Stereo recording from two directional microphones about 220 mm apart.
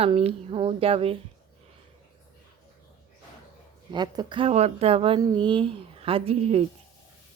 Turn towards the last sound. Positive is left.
turn(degrees=-25)  # may be behind; listen again after turning